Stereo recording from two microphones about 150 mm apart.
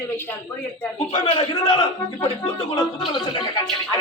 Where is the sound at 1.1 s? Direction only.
35° left (ahead or behind).